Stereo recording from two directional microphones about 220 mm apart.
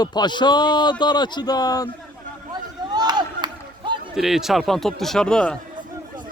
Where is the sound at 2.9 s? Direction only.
20° right (ahead or behind).